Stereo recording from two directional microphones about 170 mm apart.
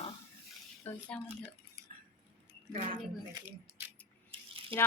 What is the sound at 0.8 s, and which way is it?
Speech, 10° left (ahead or behind).